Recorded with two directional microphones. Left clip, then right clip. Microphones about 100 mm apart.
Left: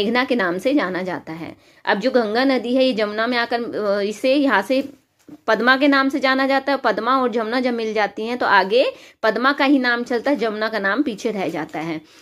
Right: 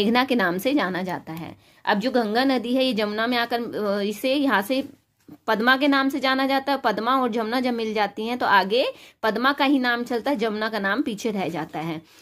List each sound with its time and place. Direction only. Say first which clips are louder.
0.0 s a woman's voice: left 2 dB; 40° right (ahead or behind); by 2.0 s 15° right (ahead or behind)
2.0 s a woman's voice: left 6 dB; 30° right (ahead or behind)